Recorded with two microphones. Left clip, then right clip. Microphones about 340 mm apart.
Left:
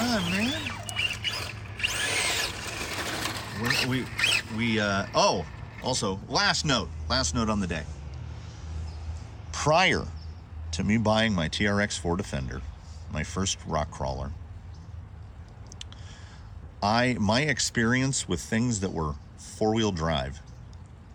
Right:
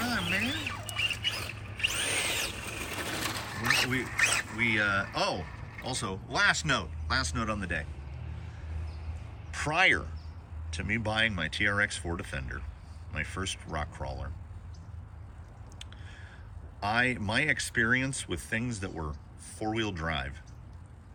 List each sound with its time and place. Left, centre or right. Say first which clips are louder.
0.0 s rodents: left 2 dB; centre
4.5 s speech: even; centre
5.4 s speech: left 5 dB; centre
9.5 s speech: left 3 dB; centre
16.8 s speech: left 4 dB; centre